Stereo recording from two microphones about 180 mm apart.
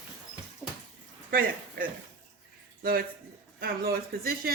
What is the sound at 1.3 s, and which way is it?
A woman's voice, 50° right (ahead or behind).